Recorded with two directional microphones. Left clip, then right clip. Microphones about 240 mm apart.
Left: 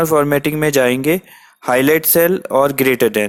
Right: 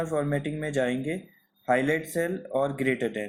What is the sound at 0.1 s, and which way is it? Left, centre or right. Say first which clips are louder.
Speech: left 14 dB; left.